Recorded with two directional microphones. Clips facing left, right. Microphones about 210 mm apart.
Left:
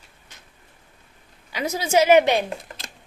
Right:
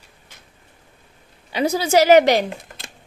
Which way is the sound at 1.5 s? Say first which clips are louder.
Right 4 dB; 35° right (ahead or behind).